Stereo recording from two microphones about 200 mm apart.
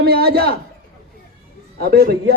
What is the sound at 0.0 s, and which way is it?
Speech, 50° right (ahead or behind).